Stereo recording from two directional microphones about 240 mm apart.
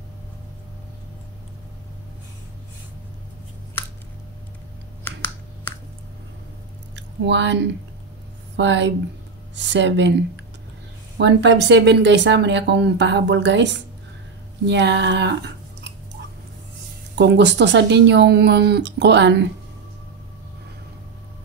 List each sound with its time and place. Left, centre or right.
7.2 s speech: right
8.5 s speech: right
17.1 s speech: right